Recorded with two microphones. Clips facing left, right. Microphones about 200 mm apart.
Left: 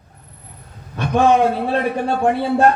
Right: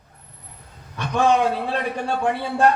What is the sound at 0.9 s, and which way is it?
A man's voice, 50° left (ahead or behind).